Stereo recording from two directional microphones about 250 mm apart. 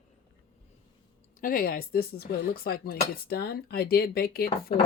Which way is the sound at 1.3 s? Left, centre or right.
Left.